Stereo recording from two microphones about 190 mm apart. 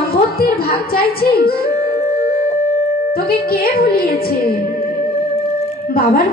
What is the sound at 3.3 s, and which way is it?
A woman's voice, 50° left (ahead or behind).